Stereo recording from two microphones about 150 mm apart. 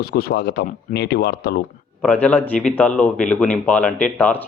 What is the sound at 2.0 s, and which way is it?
A man's voice, 10° left (ahead or behind).